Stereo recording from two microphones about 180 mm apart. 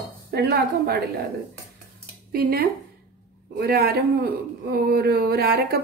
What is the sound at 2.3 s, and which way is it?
A man's voice, 60° right (ahead or behind).